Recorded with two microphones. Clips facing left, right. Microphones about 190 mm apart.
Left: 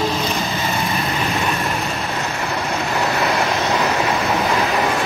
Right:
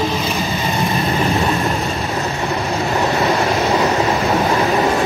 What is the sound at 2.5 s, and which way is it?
Vehicle, 15° right (ahead or behind).